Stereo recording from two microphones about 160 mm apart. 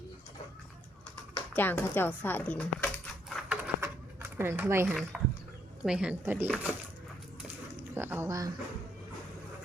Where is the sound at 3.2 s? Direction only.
5° right (ahead or behind).